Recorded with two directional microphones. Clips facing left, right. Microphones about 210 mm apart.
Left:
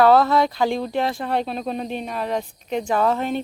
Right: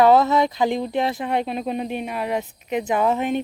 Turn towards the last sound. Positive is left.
turn(degrees=-15)  # may be behind; listen again after turning